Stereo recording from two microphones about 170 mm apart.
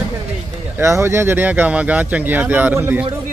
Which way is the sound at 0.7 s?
15° right (ahead or behind).